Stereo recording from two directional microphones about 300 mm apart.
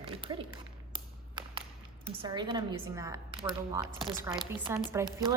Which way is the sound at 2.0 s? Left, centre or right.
Centre.